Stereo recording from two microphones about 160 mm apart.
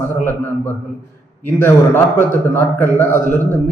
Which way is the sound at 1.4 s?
15° left (ahead or behind).